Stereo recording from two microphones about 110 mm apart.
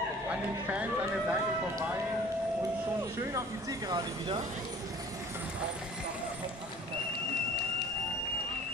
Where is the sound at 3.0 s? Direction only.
25° right (ahead or behind).